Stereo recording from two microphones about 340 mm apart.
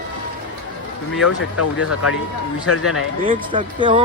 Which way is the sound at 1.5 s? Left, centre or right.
Left.